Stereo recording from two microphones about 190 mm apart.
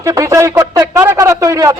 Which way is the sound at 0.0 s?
15° right (ahead or behind).